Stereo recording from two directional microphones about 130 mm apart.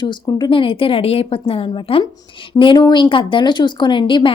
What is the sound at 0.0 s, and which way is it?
Speech, 35° left (ahead or behind).